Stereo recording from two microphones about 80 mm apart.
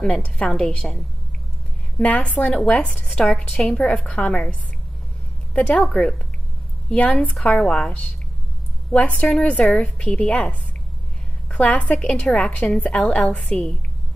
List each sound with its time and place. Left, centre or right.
0.0 s a woman's voice: centre
2.0 s a woman's voice: centre
3.1 s speech: centre
3.7 s a woman's voice: centre
11.5 s a woman's voice: centre